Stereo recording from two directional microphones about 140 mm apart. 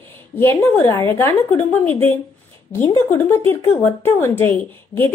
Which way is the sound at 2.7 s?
15° left (ahead or behind).